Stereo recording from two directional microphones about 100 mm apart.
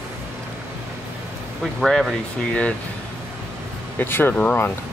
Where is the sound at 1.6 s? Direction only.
Centre (ahead or behind).